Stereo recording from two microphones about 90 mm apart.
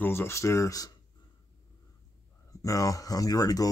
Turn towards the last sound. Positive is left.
turn(degrees=40)  # may be behind; listen again after turning